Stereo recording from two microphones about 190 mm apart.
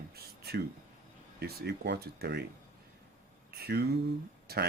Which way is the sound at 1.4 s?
55° right (ahead or behind).